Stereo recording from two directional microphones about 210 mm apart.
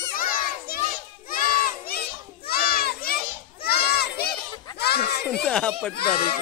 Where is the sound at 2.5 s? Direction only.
45° left (ahead or behind).